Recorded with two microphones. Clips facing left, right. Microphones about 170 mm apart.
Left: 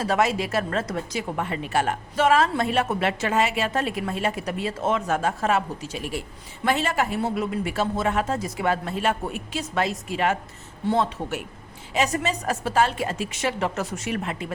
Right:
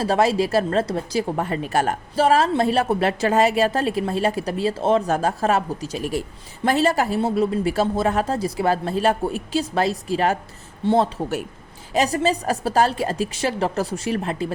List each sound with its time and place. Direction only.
0.0 s a woman's voice: 30° right (ahead or behind)